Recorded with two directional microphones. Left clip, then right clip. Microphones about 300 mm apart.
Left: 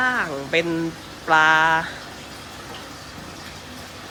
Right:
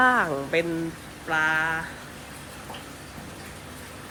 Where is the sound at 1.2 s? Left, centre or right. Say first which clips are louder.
Left 8 dB; centre.